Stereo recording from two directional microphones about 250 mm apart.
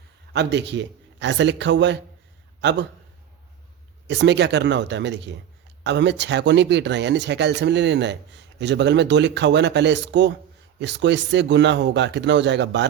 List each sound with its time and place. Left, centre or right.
0.3 s a man's voice: right
4.1 s speech: right